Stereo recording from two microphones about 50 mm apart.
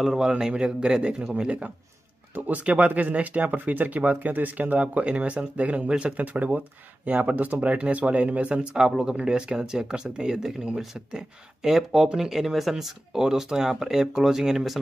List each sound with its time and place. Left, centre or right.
0.0 s a man's voice: centre
0.3 s speech: centre
2.3 s speech: right
4.7 s speech: right
6.1 s speech: right
8.7 s speech: centre